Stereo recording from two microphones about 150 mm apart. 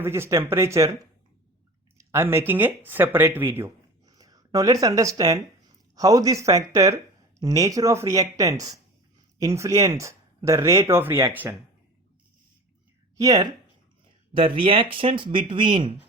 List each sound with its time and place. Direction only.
0.0 s speech: 15° right (ahead or behind)
2.0 s speech: 15° right (ahead or behind)
13.1 s speech: 25° right (ahead or behind)
14.3 s speech: 40° right (ahead or behind)